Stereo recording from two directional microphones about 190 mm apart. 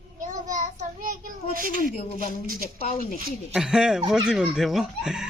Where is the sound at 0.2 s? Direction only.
45° right (ahead or behind).